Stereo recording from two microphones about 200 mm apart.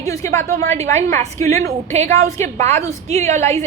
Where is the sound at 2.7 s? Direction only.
15° left (ahead or behind).